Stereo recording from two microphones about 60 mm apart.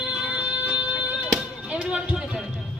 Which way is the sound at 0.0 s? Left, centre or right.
Centre.